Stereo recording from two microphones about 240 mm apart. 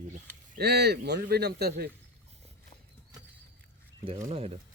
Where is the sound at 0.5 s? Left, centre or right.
Right.